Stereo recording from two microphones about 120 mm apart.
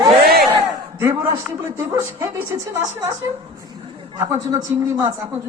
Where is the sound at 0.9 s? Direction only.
20° right (ahead or behind).